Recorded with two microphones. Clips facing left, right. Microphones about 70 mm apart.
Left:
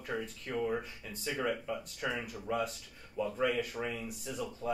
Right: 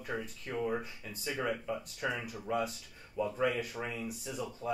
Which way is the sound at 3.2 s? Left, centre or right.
Right.